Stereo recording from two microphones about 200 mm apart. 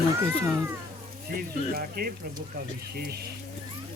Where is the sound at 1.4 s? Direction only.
45° right (ahead or behind).